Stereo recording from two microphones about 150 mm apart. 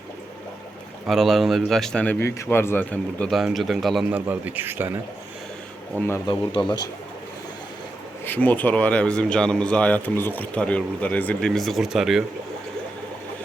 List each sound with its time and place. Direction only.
1.0 s speech: centre (ahead or behind)
4.1 s a man's voice: 10° right (ahead or behind)
6.2 s speech: 30° left (ahead or behind)
8.2 s speech: 10° left (ahead or behind)